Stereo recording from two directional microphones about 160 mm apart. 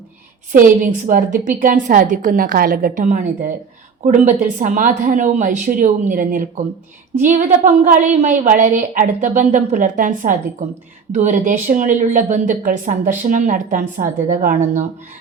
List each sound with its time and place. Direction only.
0.5 s a woman's voice: 55° right (ahead or behind)